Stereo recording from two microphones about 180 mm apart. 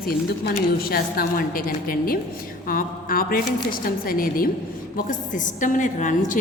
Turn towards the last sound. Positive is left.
turn(degrees=45)  # may be behind; listen again after turning